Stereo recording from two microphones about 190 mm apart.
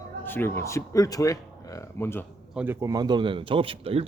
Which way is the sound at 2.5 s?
10° right (ahead or behind).